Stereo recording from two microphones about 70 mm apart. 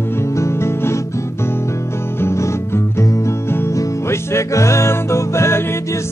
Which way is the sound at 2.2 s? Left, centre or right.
Left.